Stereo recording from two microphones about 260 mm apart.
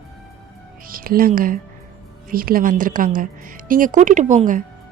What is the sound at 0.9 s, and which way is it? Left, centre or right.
Speech, right.